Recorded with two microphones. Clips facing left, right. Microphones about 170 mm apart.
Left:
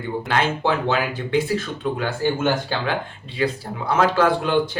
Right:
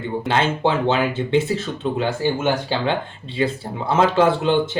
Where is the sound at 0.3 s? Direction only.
25° right (ahead or behind).